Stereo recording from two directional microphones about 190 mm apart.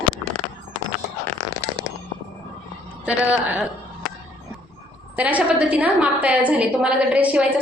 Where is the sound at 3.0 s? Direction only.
10° right (ahead or behind).